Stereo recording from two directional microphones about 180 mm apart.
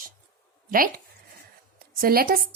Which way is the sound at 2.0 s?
55° right (ahead or behind).